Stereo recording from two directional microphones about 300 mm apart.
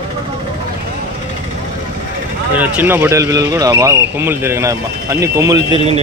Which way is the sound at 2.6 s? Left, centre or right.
Centre.